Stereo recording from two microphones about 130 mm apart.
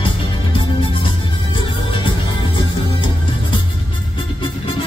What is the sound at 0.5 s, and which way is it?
Music, 40° left (ahead or behind).